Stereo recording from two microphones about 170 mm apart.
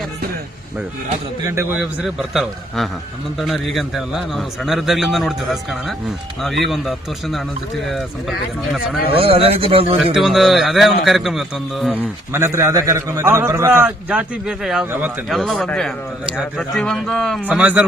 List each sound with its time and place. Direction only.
1.8 s a man's voice: centre (ahead or behind)
9.1 s speech: 35° right (ahead or behind)
10.2 s a man's voice: centre (ahead or behind)
15.3 s a man's voice: centre (ahead or behind)